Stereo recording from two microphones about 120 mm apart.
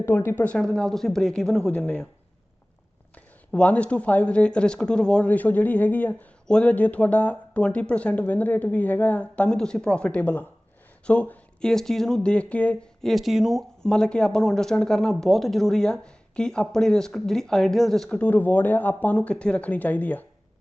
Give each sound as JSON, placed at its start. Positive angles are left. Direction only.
{"t": 0.0, "sound": "speech", "side_deg": 20}
{"t": 3.5, "sound": "speech", "side_deg": 10}